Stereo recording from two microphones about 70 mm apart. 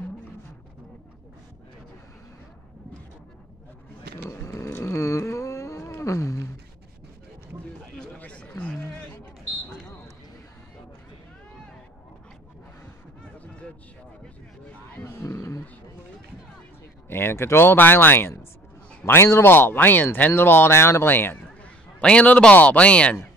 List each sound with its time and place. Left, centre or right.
4.3 s a sound: left
8.2 s a sound: centre
15.0 s roaring cats: left
17.1 s speech: left
19.0 s a man's voice: left
19.4 s speech: left
22.0 s speech: centre